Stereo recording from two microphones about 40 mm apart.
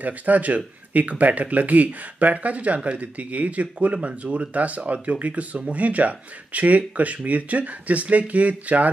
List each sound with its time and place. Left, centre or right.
0.0 s speech: right